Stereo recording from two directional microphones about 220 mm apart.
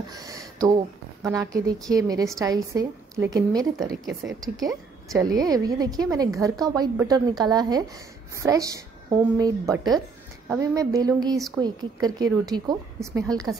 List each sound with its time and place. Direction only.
0.1 s a woman's voice: 15° right (ahead or behind)
4.0 s a woman's voice: centre (ahead or behind)
4.6 s a woman's voice: 15° right (ahead or behind)